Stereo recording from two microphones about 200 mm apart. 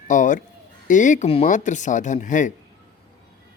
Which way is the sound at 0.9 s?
40° left (ahead or behind).